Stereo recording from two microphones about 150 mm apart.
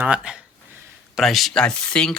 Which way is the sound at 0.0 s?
5° right (ahead or behind).